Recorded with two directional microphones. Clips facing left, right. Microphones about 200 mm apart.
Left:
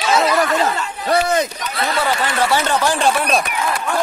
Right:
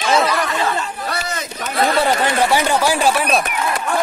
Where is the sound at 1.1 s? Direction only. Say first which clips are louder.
Left 15 dB; 55° left (ahead or behind).